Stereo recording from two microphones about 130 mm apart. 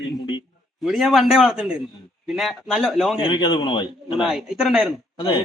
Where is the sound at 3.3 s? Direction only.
35° left (ahead or behind).